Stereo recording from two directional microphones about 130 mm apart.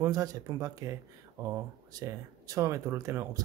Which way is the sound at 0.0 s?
30° right (ahead or behind).